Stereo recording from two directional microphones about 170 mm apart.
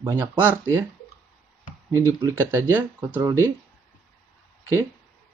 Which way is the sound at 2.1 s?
15° right (ahead or behind).